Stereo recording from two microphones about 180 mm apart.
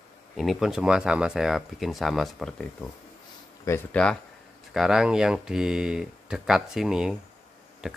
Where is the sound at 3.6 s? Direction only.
15° left (ahead or behind).